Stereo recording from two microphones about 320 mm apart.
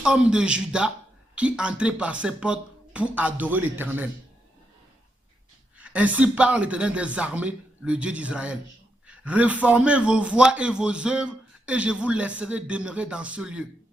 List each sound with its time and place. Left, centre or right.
0.0 s a man's voice: centre
5.8 s a man's voice: centre